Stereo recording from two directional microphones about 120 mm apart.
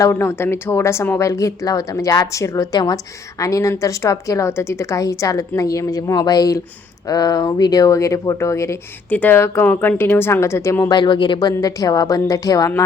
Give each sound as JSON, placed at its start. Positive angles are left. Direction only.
{"t": 0.0, "sound": "speech", "side_deg": 25}
{"t": 10.8, "sound": "speech", "side_deg": 40}